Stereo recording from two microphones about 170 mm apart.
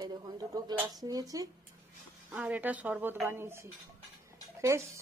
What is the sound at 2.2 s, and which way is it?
A woman's voice, 10° right (ahead or behind).